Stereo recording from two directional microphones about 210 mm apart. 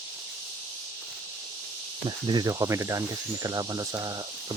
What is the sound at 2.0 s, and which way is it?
Cricket, 20° right (ahead or behind).